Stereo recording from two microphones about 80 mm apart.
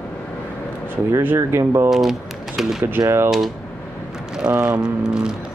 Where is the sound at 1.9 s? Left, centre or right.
Centre.